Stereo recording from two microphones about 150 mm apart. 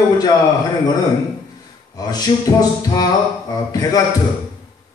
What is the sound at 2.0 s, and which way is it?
Speech, 25° left (ahead or behind).